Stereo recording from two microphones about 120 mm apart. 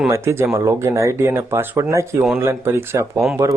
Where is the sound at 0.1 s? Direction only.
25° right (ahead or behind).